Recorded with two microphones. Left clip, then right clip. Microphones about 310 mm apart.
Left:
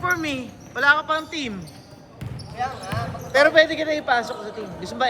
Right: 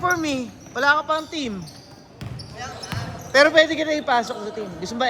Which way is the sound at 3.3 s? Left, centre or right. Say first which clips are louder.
Right 1 dB; right.